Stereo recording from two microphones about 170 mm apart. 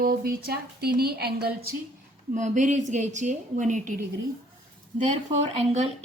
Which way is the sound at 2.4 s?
45° right (ahead or behind).